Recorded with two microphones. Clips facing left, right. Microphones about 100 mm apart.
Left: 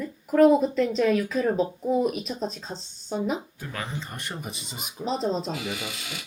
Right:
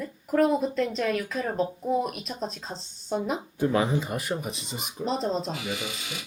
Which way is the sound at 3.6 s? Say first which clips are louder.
Right 11 dB; 20° right (ahead or behind).